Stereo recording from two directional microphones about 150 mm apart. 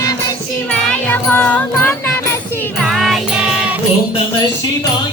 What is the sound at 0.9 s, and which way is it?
Music, 10° left (ahead or behind).